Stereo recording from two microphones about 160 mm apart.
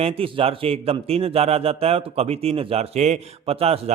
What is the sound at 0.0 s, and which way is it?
A man's voice, 35° right (ahead or behind).